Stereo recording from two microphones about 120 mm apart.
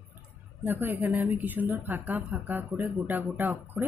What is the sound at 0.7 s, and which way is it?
Speech, 15° right (ahead or behind).